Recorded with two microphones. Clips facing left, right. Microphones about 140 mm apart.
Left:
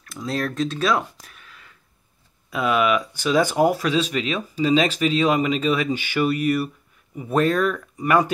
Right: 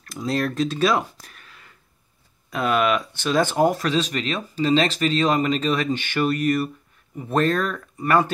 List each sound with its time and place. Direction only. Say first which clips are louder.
0.0 s speech: right 2 dB; centre (ahead or behind)